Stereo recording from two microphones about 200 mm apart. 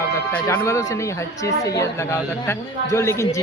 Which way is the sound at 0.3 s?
10° left (ahead or behind).